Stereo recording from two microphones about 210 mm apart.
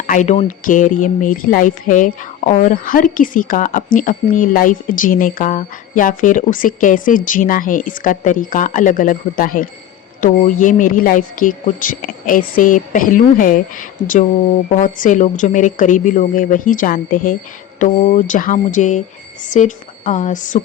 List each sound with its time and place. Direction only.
0.1 s speech: 35° left (ahead or behind)